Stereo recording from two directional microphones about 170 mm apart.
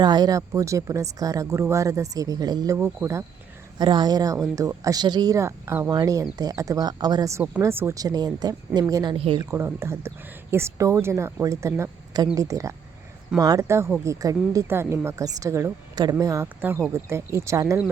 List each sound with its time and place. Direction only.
0.0 s speech: 25° right (ahead or behind)
9.1 s speech: 35° right (ahead or behind)
9.4 s speech: 15° right (ahead or behind)